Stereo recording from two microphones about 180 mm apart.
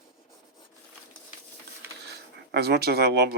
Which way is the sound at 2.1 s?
65° right (ahead or behind).